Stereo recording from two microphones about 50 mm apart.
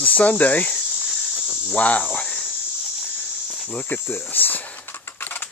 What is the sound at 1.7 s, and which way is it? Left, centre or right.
Cricket, left.